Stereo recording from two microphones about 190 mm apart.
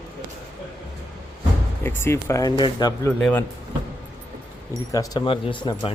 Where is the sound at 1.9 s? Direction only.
10° left (ahead or behind).